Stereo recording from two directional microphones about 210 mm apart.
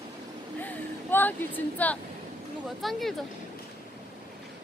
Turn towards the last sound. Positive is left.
turn(degrees=0)  # may be behind; listen again after turning